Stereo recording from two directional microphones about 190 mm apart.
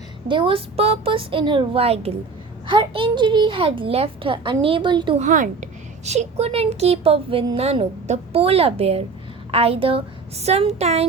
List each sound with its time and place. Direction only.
0.3 s a child's voice: 25° right (ahead or behind)
5.2 s a woman's voice: 40° right (ahead or behind)